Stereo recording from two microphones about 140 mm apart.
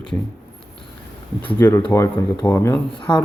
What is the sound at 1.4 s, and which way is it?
Speech, 15° left (ahead or behind).